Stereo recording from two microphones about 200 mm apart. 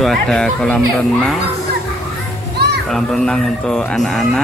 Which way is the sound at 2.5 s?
55° right (ahead or behind).